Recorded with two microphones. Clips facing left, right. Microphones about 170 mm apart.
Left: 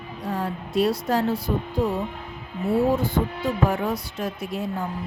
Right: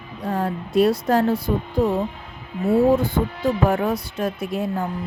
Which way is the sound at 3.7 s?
55° right (ahead or behind).